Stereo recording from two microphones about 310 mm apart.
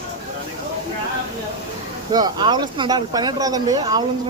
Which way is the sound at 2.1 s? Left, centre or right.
Centre.